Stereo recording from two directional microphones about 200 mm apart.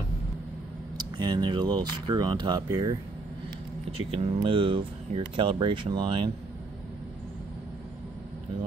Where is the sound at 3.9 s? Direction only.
30° right (ahead or behind).